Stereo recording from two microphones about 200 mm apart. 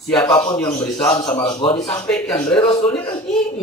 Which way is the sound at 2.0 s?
5° left (ahead or behind).